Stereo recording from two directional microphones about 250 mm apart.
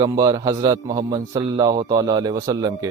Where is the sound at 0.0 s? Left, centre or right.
Centre.